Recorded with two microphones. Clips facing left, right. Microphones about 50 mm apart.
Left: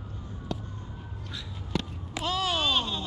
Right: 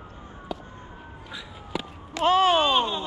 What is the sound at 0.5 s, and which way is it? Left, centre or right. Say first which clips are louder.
Emergency vehicle: right 1 dB; centre.